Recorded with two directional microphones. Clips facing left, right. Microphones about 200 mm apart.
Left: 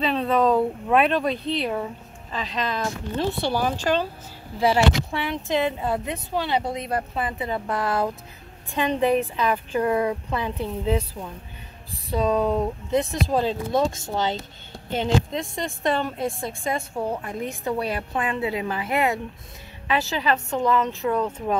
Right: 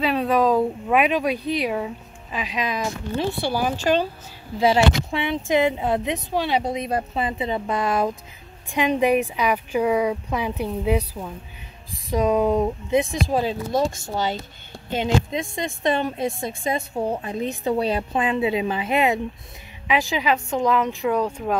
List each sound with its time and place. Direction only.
0.0 s a sound: 10° right (ahead or behind)
1.6 s a woman's voice: 10° right (ahead or behind)
21.3 s speech: centre (ahead or behind)